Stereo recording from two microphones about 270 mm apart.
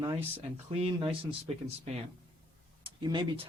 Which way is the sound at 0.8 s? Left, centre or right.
Centre.